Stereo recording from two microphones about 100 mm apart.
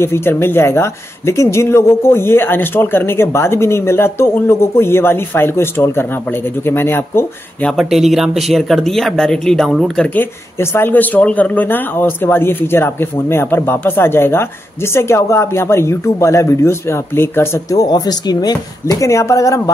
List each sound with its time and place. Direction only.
0.0 s speech: 25° left (ahead or behind)
7.8 s speech: centre (ahead or behind)
10.1 s speech: 25° left (ahead or behind)
17.7 s speech: 40° left (ahead or behind)